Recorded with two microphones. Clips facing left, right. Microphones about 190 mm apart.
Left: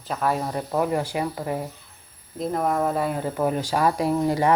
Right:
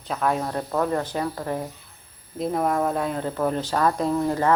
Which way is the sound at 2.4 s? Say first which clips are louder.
Even; centre (ahead or behind).